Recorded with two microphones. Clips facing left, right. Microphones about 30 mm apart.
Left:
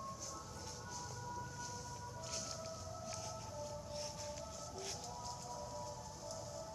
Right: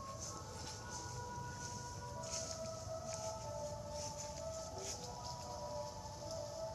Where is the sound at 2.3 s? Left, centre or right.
Centre.